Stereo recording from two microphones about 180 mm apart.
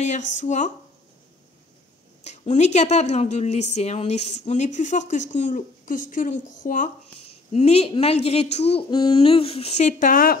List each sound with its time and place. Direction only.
0.0 s speech: 40° left (ahead or behind)
2.2 s a woman's voice: 40° left (ahead or behind)